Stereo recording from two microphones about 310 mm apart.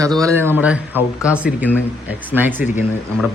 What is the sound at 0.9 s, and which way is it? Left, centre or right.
Speech, centre.